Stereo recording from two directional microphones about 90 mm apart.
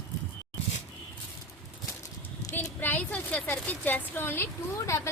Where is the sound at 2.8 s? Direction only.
20° left (ahead or behind).